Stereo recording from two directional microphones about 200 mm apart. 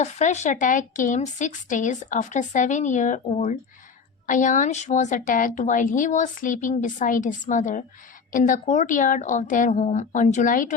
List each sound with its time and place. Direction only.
0.0 s a woman's voice: 35° left (ahead or behind)